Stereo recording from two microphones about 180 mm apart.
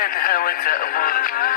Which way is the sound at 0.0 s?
55° left (ahead or behind).